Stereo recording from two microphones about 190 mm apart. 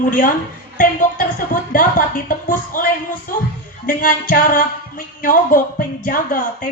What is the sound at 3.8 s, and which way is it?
A woman's voice, 45° left (ahead or behind).